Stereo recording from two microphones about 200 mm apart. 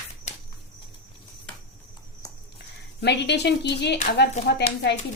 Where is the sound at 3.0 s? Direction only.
55° left (ahead or behind).